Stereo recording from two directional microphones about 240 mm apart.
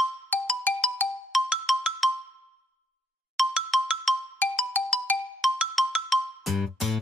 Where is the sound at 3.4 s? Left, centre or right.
Centre.